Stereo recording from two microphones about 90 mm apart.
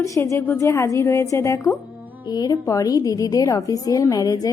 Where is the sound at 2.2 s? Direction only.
50° left (ahead or behind).